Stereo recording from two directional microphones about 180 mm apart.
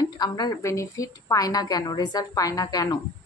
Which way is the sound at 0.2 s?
20° left (ahead or behind).